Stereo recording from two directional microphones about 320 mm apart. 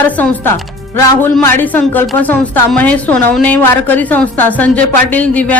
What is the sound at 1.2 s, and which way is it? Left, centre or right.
Speech, centre.